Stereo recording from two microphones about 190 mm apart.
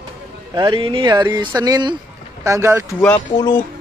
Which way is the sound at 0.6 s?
25° right (ahead or behind).